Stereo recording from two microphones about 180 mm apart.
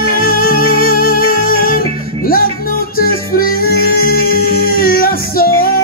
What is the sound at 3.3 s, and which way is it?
Music, 55° left (ahead or behind).